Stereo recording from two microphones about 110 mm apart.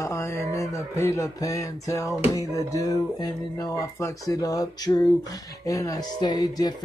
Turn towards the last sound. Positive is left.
turn(degrees=40)  # may be behind; listen again after turning